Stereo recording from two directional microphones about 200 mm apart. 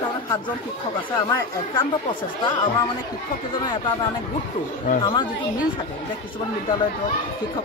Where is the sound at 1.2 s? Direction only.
15° left (ahead or behind).